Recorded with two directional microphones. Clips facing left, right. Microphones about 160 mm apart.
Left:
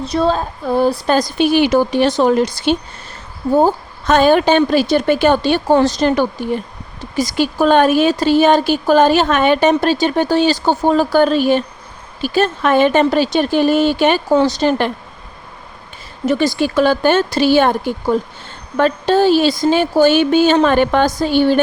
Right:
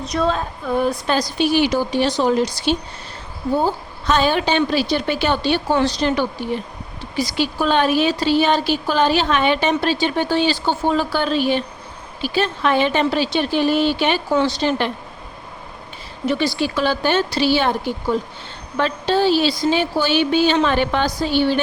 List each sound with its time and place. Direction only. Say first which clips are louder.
0.0 s a woman's voice: left 4 dB; 30° left (ahead or behind)
1.1 s speech: left 3 dB; 50° left (ahead or behind)
16.2 s speech: left 4 dB; 45° left (ahead or behind)